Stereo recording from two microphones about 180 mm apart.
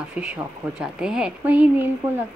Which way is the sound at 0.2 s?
5° right (ahead or behind).